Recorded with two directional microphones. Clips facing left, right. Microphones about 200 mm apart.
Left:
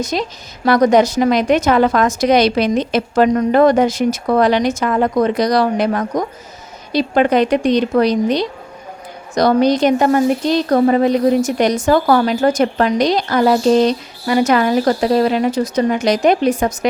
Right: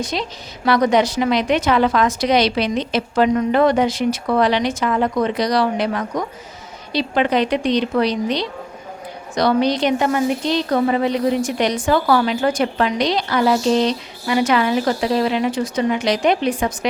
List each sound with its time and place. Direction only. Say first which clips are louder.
0.0 s speech: left 4 dB; 45° left (ahead or behind)